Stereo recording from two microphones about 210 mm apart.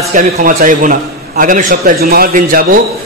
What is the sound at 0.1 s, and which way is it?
A man's voice, 40° right (ahead or behind).